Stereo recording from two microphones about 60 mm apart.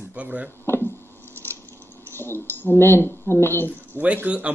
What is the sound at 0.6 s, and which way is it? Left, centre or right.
Speech, left.